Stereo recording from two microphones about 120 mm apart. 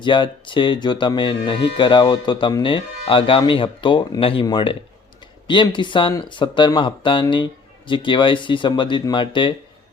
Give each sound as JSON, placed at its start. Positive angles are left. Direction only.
{"t": 0.0, "sound": "speech", "side_deg": 45}